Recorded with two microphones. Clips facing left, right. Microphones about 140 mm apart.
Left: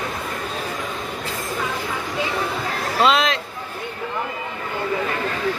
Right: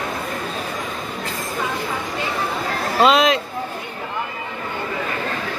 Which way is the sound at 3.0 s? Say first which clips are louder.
Right 3 dB; centre (ahead or behind).